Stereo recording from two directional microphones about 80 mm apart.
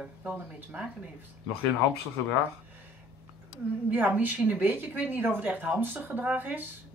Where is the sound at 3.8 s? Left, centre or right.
Centre.